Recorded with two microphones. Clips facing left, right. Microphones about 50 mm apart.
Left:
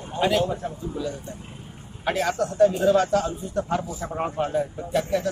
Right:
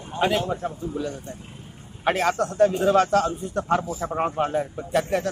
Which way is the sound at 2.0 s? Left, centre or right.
Right.